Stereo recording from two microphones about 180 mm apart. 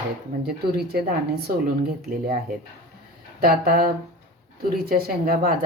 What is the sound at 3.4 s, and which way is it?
Speech, 55° right (ahead or behind).